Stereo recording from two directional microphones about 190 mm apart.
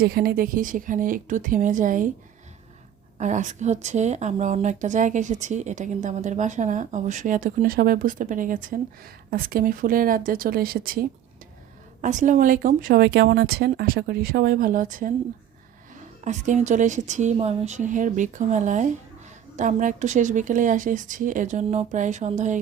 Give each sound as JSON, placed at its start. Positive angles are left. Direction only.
{"t": 0.0, "sound": "speech", "side_deg": -55}
{"t": 3.2, "sound": "a woman's voice", "side_deg": -40}
{"t": 12.0, "sound": "speech", "side_deg": -40}
{"t": 16.2, "sound": "a woman's voice", "side_deg": -40}